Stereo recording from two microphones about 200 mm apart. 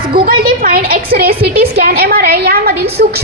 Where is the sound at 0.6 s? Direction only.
45° right (ahead or behind).